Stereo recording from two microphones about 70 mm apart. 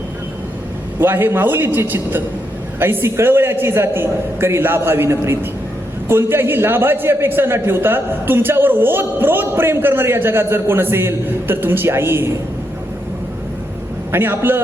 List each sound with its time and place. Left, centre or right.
0.9 s a man's voice: right
14.1 s a man's voice: right